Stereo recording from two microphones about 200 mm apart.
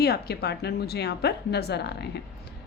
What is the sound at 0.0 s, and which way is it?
A woman's voice, 50° left (ahead or behind).